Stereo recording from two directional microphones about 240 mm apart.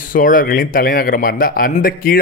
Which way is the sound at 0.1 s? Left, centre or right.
Left.